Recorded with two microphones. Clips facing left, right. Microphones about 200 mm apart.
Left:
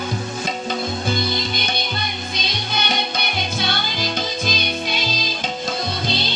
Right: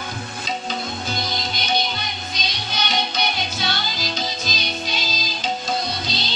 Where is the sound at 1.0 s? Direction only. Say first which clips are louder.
Left 5 dB; 55° left (ahead or behind).